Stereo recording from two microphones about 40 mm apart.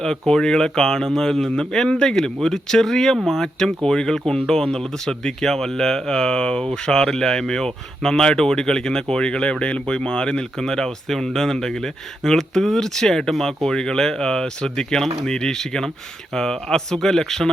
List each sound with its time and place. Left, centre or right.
0.0 s speech: centre
3.6 s speech: centre
10.6 s speech: centre